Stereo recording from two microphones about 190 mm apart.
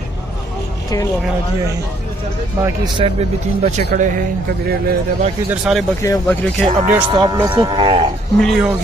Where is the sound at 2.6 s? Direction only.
30° right (ahead or behind).